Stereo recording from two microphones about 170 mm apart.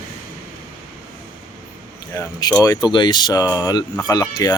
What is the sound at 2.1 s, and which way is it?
Speech, 20° left (ahead or behind).